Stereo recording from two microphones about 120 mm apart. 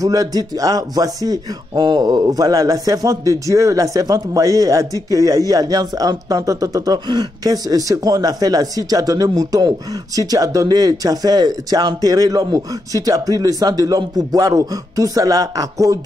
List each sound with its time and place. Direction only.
0.0 s speech: 30° right (ahead or behind)